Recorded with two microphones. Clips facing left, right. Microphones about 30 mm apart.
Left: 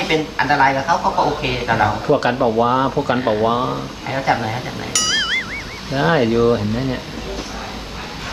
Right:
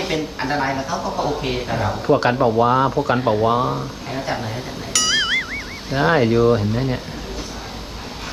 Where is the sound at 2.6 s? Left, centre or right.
Left.